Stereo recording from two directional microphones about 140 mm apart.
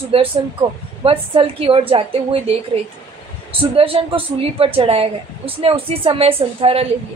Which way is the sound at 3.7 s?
40° right (ahead or behind).